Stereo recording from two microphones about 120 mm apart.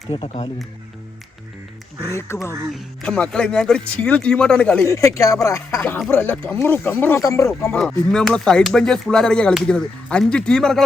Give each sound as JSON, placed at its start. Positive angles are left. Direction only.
{"t": 0.1, "sound": "speech", "side_deg": 50}
{"t": 2.0, "sound": "speech", "side_deg": 20}
{"t": 2.7, "sound": "speech", "side_deg": 10}
{"t": 4.9, "sound": "speech", "side_deg": 25}
{"t": 7.2, "sound": "speech", "side_deg": 25}
{"t": 7.7, "sound": "speech", "side_deg": 5}